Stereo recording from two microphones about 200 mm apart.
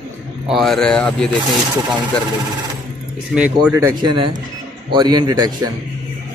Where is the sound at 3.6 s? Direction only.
10° right (ahead or behind).